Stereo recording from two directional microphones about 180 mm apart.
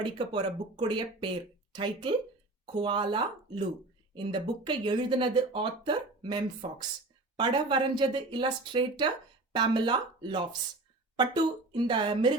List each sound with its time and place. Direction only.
0.0 s speech: 25° right (ahead or behind)
11.7 s speech: 25° right (ahead or behind)